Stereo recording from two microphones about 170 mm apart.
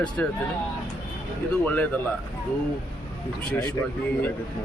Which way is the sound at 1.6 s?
10° left (ahead or behind).